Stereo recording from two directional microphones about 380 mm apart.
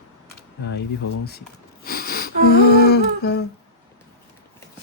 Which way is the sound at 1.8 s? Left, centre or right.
Left.